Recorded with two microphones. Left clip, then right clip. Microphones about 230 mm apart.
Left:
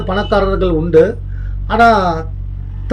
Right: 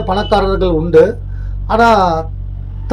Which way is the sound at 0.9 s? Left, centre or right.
Centre.